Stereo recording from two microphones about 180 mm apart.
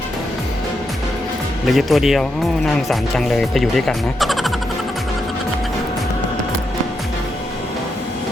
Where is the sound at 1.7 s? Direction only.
Centre (ahead or behind).